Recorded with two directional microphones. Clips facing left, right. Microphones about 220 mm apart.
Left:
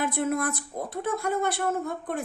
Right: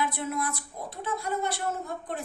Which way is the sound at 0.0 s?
50° left (ahead or behind).